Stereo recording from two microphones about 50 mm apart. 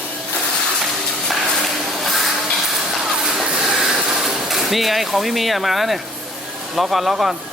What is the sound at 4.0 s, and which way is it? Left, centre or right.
Speech, centre.